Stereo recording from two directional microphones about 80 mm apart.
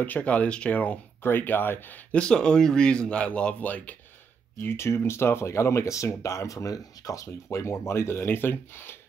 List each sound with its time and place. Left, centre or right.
0.0 s speech: centre
2.1 s speech: centre
4.6 s speech: left